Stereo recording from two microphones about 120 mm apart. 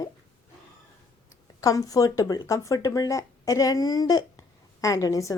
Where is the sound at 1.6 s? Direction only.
30° left (ahead or behind).